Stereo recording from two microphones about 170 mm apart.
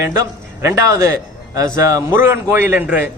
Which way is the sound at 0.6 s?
20° right (ahead or behind).